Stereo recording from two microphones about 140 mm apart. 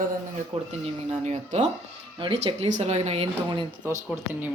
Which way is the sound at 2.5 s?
55° right (ahead or behind).